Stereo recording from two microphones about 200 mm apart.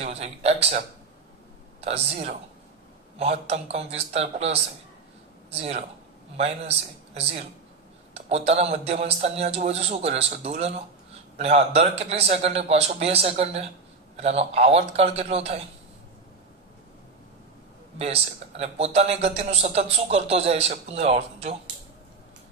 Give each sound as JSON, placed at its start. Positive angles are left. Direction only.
{"t": 0.0, "sound": "speech", "side_deg": -30}
{"t": 1.8, "sound": "a man's voice", "side_deg": -30}
{"t": 17.9, "sound": "a man's voice", "side_deg": -30}